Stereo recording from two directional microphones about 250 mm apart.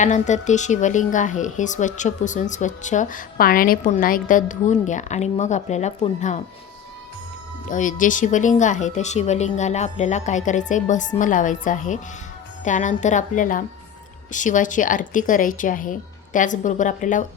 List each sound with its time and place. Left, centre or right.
0.0 s speech: left
7.7 s speech: left